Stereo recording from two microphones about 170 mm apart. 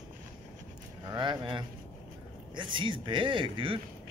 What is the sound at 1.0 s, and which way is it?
Speech, 25° right (ahead or behind).